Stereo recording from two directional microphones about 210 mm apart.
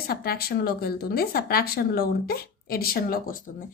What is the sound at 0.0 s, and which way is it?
A woman's voice, 45° left (ahead or behind).